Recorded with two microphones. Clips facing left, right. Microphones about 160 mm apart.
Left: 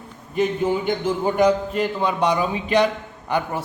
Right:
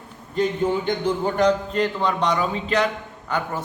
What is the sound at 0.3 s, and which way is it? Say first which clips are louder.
A man's voice: left 1 dB; 10° left (ahead or behind).